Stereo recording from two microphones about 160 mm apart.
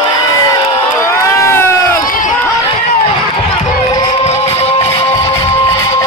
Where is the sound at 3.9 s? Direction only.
25° left (ahead or behind).